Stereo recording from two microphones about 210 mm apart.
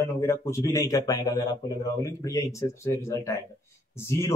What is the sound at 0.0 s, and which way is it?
Speech, 15° left (ahead or behind).